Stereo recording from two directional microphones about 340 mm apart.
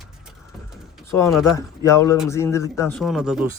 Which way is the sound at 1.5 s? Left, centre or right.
Centre.